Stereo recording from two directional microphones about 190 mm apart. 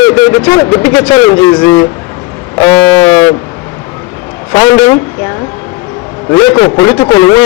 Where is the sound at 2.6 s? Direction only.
20° left (ahead or behind).